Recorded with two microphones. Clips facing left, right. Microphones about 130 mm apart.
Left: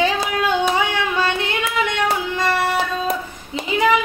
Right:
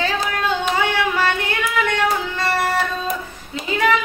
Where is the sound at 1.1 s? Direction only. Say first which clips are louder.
Even; 20° left (ahead or behind).